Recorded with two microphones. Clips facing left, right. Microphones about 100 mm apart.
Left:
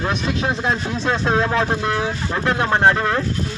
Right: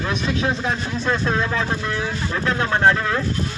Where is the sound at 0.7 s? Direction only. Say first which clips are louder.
Left 2 dB; 20° left (ahead or behind).